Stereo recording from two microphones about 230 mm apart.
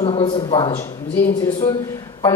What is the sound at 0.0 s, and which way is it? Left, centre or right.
Speech, left.